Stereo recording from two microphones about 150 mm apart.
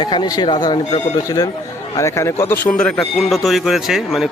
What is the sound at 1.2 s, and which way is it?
Speech, 25° left (ahead or behind).